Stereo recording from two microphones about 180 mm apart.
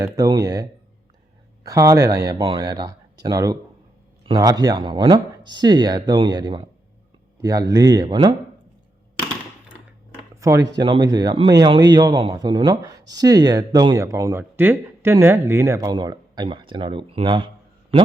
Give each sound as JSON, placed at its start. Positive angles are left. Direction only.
{"t": 0.0, "sound": "speech", "side_deg": -20}
{"t": 10.4, "sound": "speech", "side_deg": -20}